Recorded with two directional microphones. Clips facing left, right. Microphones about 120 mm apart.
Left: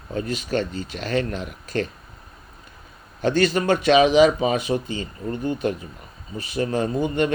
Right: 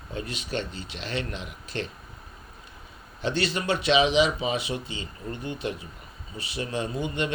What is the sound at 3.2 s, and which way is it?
Speech, 45° left (ahead or behind).